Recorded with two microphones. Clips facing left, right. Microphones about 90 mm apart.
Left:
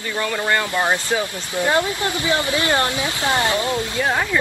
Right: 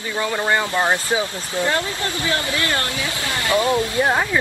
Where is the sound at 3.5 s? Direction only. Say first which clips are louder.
Right 4 dB; 25° right (ahead or behind).